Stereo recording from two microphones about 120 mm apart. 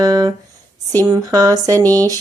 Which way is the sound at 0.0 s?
30° right (ahead or behind).